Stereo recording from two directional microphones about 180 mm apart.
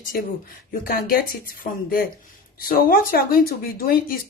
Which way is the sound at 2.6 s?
55° left (ahead or behind).